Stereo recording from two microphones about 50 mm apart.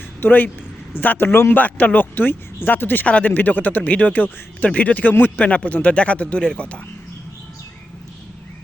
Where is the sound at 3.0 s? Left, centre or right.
Left.